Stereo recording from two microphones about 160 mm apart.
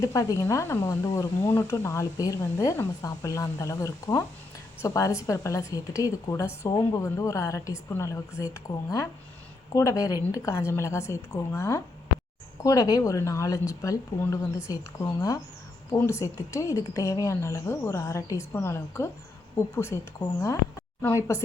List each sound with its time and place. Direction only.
0.0 s speech: 20° left (ahead or behind)